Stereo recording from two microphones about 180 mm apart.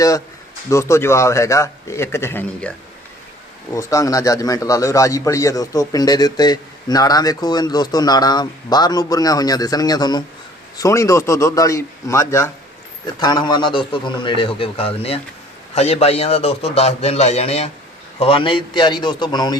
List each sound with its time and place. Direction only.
0.7 s a man's voice: 15° left (ahead or behind)
3.8 s a man's voice: 20° left (ahead or behind)